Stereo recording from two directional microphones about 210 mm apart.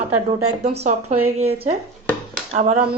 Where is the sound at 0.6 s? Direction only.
30° right (ahead or behind).